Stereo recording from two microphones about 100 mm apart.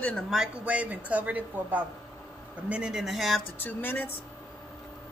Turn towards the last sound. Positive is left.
turn(degrees=20)  # may be behind; listen again after turning